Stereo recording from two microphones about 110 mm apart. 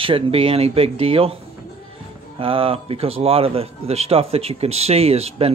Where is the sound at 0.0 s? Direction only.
55° right (ahead or behind).